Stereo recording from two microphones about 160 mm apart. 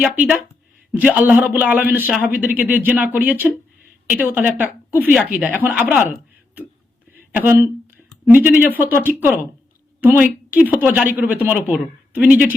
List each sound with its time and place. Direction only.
0.0 s speech: 10° right (ahead or behind)
7.2 s speech: 10° right (ahead or behind)